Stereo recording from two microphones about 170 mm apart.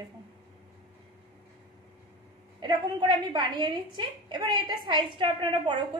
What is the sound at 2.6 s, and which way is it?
A woman's voice, 25° right (ahead or behind).